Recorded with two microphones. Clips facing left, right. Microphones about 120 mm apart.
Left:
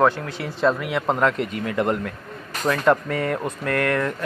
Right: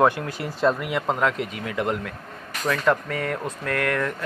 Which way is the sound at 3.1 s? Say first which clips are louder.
Left 3 dB; centre (ahead or behind).